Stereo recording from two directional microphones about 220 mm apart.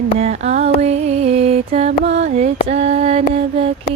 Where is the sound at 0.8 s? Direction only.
30° right (ahead or behind).